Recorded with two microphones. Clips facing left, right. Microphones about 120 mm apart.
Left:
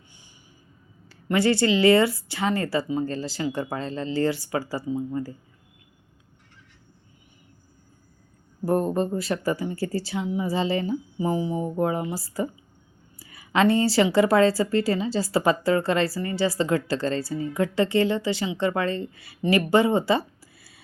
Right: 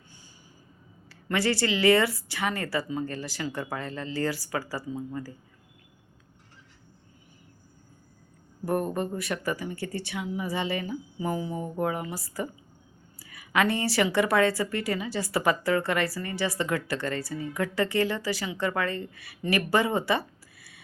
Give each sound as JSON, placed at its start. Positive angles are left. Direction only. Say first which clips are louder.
{"t": 1.0, "sound": "a woman's voice", "louder": "left 5 dB", "side_deg": 25}
{"t": 8.6, "sound": "a woman's voice", "louder": "left 5 dB", "side_deg": 25}